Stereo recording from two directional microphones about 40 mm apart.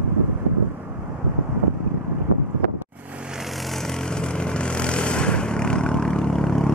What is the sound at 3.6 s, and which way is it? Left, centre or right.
Vehicle, centre.